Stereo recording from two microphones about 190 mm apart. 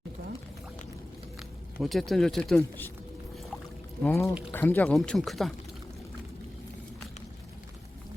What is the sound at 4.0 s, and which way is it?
Speech, 15° left (ahead or behind).